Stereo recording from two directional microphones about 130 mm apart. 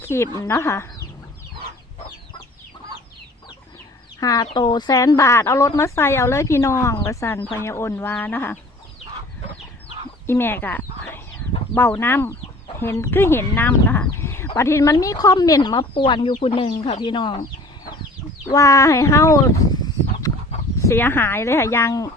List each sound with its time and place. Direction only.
0.0 s speech: 20° left (ahead or behind)
4.2 s speech: 30° left (ahead or behind)
10.2 s speech: 15° left (ahead or behind); by 17.4 s 40° left (ahead or behind)
18.5 s speech: 25° left (ahead or behind)